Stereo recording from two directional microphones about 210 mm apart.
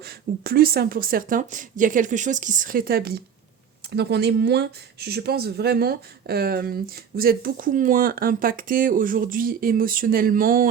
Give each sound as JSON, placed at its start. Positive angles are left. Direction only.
{"t": 0.0, "sound": "speech", "side_deg": -45}